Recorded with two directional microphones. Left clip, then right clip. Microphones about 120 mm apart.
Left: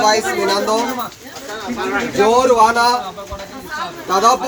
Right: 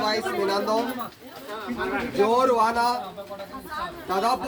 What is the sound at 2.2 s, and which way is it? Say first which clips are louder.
Speech: left 9 dB; 10° left (ahead or behind).